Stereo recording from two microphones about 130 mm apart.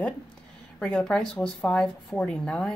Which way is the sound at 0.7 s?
5° left (ahead or behind).